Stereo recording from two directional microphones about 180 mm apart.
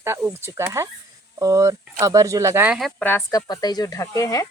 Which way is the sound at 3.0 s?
10° left (ahead or behind).